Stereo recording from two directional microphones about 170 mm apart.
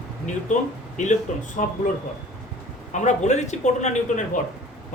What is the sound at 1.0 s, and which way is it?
Speech, 45° left (ahead or behind).